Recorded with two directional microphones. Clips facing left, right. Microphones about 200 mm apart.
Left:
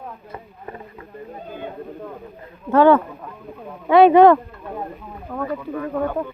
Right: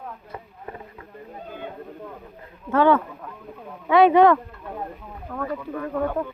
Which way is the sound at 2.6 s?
40° left (ahead or behind).